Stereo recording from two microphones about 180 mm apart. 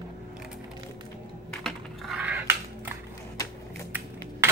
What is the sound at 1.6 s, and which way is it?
Computer keyboard, centre (ahead or behind).